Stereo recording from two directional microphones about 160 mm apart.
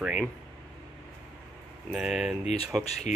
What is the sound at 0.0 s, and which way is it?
Speech, 5° right (ahead or behind).